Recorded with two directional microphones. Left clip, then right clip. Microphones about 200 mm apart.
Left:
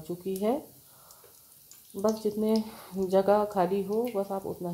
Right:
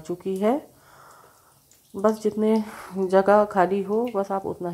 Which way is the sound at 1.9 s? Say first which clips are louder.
Right 6 dB; 25° right (ahead or behind).